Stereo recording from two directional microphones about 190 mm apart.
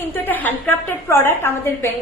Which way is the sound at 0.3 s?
10° left (ahead or behind).